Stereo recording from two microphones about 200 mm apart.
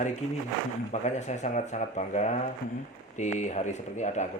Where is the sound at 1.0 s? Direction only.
35° left (ahead or behind).